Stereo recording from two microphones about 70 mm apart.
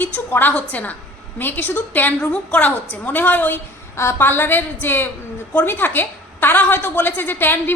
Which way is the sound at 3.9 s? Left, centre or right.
Left.